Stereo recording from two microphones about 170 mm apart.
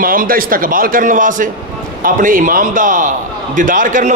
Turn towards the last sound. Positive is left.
turn(degrees=-50)  # may be behind; listen again after turning